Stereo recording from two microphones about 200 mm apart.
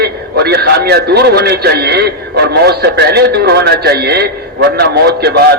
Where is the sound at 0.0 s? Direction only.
55° right (ahead or behind).